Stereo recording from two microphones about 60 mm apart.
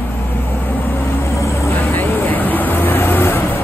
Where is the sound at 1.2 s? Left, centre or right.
Left.